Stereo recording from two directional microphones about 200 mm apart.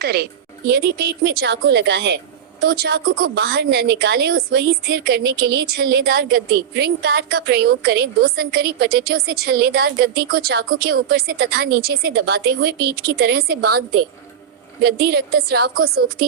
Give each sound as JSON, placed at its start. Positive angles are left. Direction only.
{"t": 0.0, "sound": "a woman's voice", "side_deg": -55}